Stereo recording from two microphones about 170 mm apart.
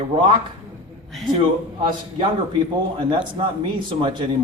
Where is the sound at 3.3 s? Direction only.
30° right (ahead or behind).